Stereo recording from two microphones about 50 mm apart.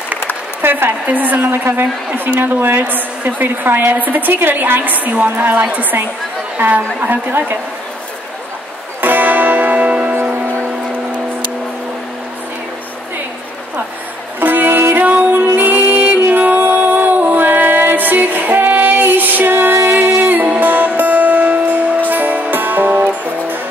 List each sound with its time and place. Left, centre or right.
0.6 s a woman's voice: right
9.0 s music: right
14.4 s music: right
15.0 s music: right
15.4 s music: right
20.2 s music: right